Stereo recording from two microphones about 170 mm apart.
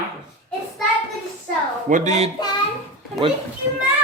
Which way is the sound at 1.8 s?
45° right (ahead or behind).